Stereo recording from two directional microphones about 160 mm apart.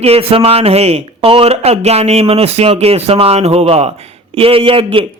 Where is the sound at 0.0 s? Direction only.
35° right (ahead or behind).